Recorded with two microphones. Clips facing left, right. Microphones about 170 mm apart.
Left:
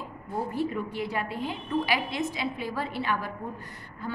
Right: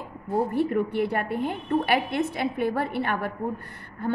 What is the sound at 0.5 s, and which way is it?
A woman's voice, 60° right (ahead or behind).